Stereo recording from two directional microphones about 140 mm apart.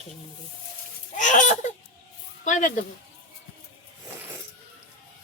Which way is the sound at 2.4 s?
65° left (ahead or behind).